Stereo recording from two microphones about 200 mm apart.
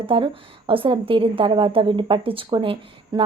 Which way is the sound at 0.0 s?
25° right (ahead or behind).